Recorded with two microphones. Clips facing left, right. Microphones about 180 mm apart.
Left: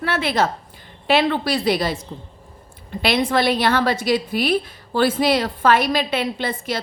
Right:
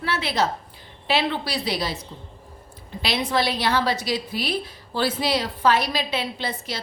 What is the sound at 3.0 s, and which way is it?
A woman's voice, 55° left (ahead or behind).